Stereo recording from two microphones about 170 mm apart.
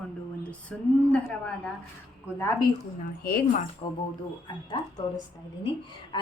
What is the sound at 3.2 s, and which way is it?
Speech, 60° left (ahead or behind).